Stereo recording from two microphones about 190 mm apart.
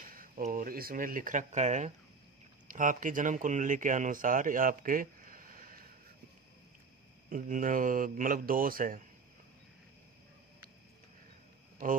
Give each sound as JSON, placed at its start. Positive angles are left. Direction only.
{"t": 0.0, "sound": "speech", "side_deg": -50}
{"t": 7.2, "sound": "speech", "side_deg": -45}
{"t": 11.8, "sound": "speech", "side_deg": -45}